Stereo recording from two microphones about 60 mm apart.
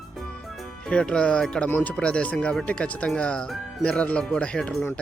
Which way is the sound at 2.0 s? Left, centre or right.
Centre.